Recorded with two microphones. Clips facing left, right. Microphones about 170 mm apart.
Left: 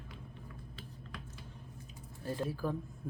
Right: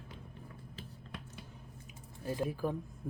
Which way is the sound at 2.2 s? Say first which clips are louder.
Right 1 dB; 10° right (ahead or behind).